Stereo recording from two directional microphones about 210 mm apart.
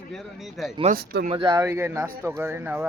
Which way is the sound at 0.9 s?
45° right (ahead or behind).